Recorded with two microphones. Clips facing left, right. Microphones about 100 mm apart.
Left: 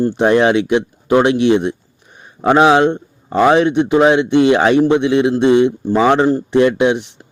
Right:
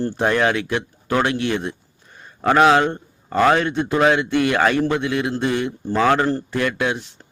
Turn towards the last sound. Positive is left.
turn(degrees=20)  # may be behind; listen again after turning